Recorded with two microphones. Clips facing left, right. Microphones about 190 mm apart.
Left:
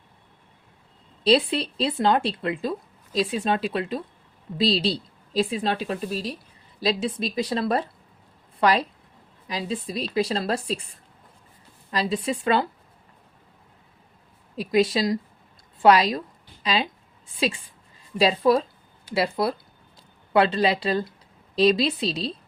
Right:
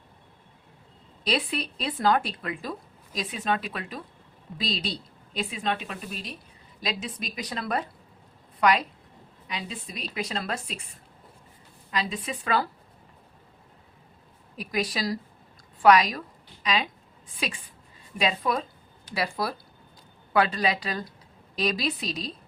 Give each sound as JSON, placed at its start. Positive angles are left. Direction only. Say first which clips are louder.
{"t": 1.2, "sound": "a woman's voice", "louder": "left 8 dB", "side_deg": 30}
{"t": 11.9, "sound": "a woman's voice", "louder": "left 6 dB", "side_deg": 35}
{"t": 14.5, "sound": "a woman's voice", "louder": "left 9 dB", "side_deg": 25}